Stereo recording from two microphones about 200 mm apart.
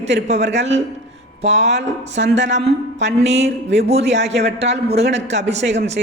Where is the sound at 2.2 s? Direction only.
65° right (ahead or behind).